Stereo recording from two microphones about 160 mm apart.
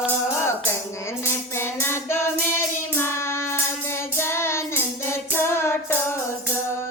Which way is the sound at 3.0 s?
15° left (ahead or behind).